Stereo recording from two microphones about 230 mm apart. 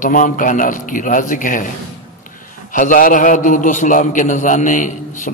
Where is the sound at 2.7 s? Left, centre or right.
Left.